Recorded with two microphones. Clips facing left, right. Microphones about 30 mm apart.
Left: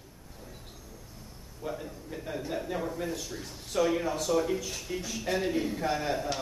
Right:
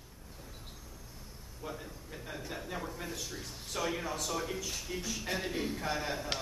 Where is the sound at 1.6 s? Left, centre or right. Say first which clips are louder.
Left 6 dB; centre.